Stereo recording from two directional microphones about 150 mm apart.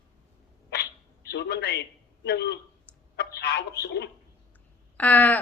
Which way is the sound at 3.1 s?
90° left.